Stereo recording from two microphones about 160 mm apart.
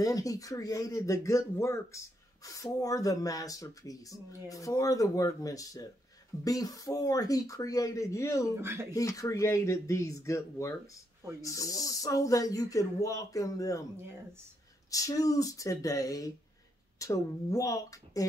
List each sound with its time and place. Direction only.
0.0 s speech: 20° left (ahead or behind)
8.5 s speech: 15° right (ahead or behind)
8.9 s speech: 20° left (ahead or behind)
14.9 s speech: 20° left (ahead or behind)